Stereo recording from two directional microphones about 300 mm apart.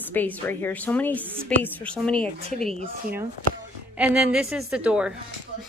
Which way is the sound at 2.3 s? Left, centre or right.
Centre.